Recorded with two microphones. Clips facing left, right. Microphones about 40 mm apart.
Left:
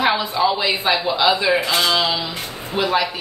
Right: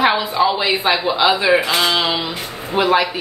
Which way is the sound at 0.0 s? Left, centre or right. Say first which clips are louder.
Right 3 dB; centre.